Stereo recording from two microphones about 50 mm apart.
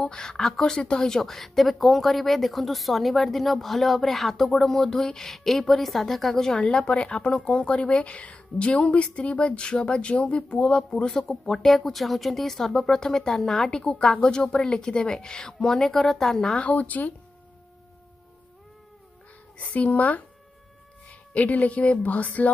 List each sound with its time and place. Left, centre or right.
0.0 s a woman's voice: centre
6.6 s a woman's voice: left
10.8 s speech: centre
16.6 s speech: left
19.6 s speech: left